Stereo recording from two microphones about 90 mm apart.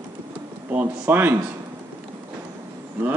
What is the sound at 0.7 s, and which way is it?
Speech, 20° right (ahead or behind).